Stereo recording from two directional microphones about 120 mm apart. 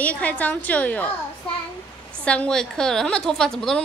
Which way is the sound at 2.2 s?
10° left (ahead or behind).